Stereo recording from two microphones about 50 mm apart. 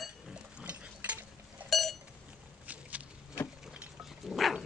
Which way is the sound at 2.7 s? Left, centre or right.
Right.